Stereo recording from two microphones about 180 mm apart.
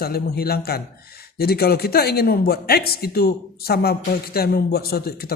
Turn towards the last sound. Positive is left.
turn(degrees=60)  # may be behind; listen again after turning